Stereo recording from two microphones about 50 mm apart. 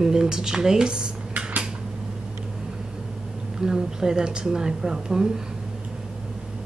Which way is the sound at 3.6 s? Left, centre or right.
Centre.